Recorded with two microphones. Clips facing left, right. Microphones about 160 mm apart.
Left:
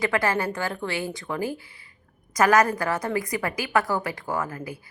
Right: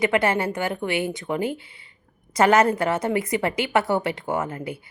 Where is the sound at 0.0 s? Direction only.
20° right (ahead or behind).